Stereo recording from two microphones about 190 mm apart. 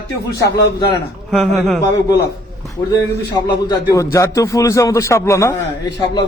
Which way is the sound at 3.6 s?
15° left (ahead or behind).